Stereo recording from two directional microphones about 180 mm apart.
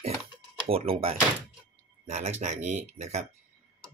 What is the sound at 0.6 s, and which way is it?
Speech, 30° right (ahead or behind).